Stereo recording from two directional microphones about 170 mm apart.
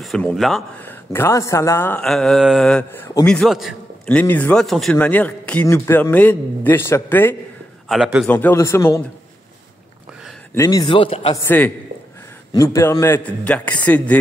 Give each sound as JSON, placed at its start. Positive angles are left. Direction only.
{"t": 0.0, "sound": "speech", "side_deg": 5}
{"t": 0.8, "sound": "a man's voice", "side_deg": 15}
{"t": 10.5, "sound": "a man's voice", "side_deg": 20}
{"t": 11.4, "sound": "a man's voice", "side_deg": 10}